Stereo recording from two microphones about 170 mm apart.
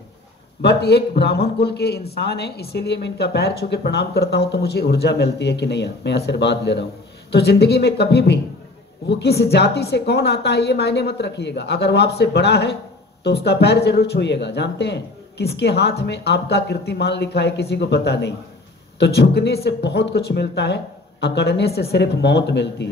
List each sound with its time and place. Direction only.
0.6 s a man's voice: 75° left (ahead or behind)